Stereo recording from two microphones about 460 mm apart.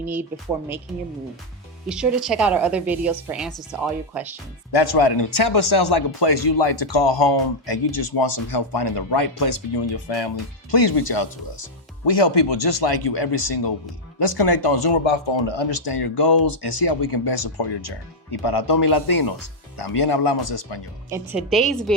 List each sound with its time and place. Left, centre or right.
0.0 s a woman's voice: centre
1.9 s a woman's voice: centre
4.7 s speech: left
10.7 s speech: left
15.0 s speech: left
21.1 s a woman's voice: centre